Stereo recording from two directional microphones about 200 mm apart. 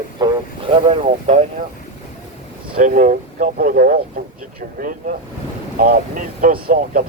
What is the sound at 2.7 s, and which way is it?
Speech, 40° right (ahead or behind).